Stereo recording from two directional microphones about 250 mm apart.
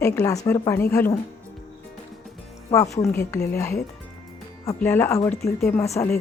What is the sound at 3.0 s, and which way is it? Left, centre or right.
A woman's voice, centre.